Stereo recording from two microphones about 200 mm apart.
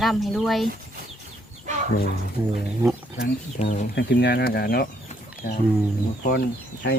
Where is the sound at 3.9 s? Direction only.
60° left (ahead or behind).